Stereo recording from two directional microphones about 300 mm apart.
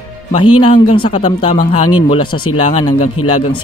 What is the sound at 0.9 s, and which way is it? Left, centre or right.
Speech, centre.